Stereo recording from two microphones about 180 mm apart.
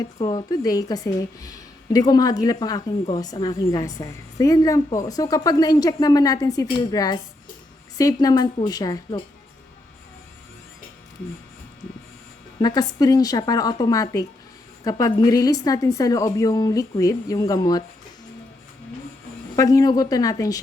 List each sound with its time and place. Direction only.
0.0 s speech: 25° left (ahead or behind)
12.5 s speech: 20° left (ahead or behind)
19.5 s speech: 20° left (ahead or behind)